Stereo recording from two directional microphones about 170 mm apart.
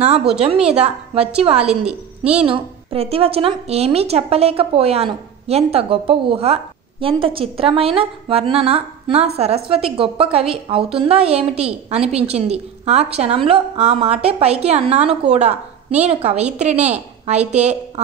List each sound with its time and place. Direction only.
0.7 s a woman's voice: 35° right (ahead or behind)
1.6 s a woman's voice: 5° right (ahead or behind)
2.4 s a woman's voice: 30° right (ahead or behind)
16.7 s a woman's voice: 10° right (ahead or behind)
17.3 s a woman's voice: 40° right (ahead or behind)